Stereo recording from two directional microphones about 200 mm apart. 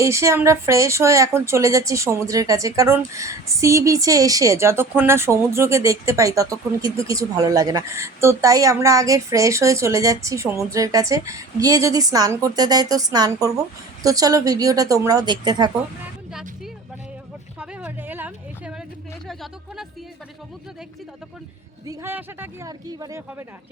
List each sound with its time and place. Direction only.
0.0 s a woman's voice: 15° right (ahead or behind)
17.6 s a sound: 10° right (ahead or behind)
19.3 s speech: centre (ahead or behind)
21.8 s a woman's voice: 10° right (ahead or behind)